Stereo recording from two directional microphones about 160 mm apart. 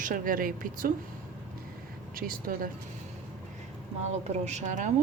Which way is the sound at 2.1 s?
65° right (ahead or behind).